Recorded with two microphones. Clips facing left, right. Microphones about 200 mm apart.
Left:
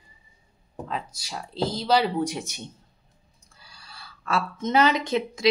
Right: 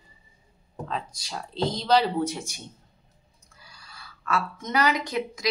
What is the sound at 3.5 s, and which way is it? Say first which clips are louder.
Speech: left 1 dB; 30° left (ahead or behind).